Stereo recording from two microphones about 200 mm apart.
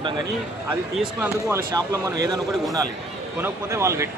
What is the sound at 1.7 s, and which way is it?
Speech, 20° right (ahead or behind).